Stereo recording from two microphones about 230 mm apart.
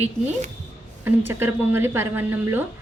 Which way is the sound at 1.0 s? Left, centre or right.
Centre.